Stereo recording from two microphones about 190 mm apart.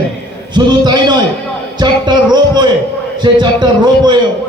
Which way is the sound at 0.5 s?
25° right (ahead or behind).